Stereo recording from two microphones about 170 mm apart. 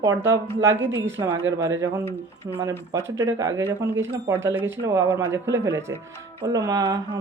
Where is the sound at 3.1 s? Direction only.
15° right (ahead or behind).